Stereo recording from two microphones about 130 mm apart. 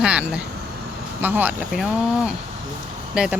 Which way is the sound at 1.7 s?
Centre (ahead or behind).